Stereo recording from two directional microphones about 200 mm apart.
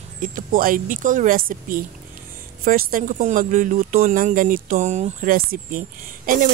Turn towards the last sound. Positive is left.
turn(degrees=-45)  # may be behind; listen again after turning